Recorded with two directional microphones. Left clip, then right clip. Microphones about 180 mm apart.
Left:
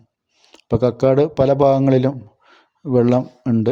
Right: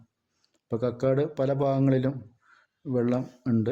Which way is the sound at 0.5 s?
35° left (ahead or behind).